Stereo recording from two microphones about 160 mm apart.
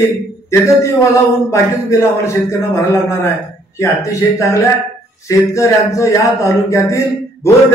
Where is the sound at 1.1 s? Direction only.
20° left (ahead or behind).